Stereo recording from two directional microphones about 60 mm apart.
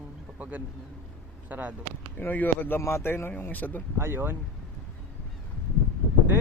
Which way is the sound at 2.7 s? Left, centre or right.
Left.